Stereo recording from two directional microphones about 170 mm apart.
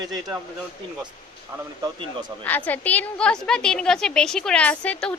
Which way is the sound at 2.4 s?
10° left (ahead or behind).